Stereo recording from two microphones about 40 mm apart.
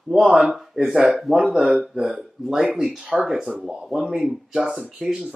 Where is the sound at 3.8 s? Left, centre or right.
Centre.